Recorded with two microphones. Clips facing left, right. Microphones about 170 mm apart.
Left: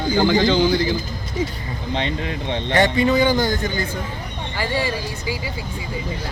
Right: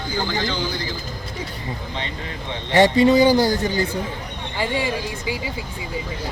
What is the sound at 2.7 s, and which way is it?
A man's voice, 30° right (ahead or behind).